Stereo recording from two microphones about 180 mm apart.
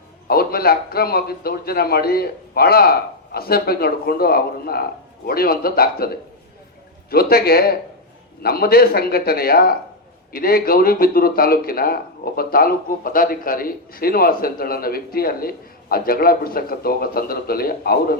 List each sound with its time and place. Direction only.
0.3 s speech: 55° left (ahead or behind)
7.1 s speech: 60° left (ahead or behind)